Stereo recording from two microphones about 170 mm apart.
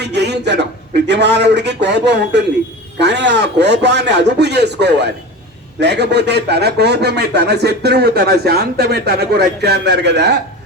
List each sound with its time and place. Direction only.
0.0 s a man's voice: 80° right